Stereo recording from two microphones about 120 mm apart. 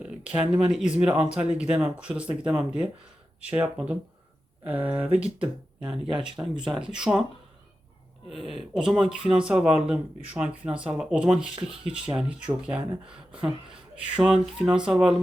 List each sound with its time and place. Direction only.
0.0 s speech: 10° right (ahead or behind)
6.9 s speech: 5° right (ahead or behind)
8.3 s speech: centre (ahead or behind)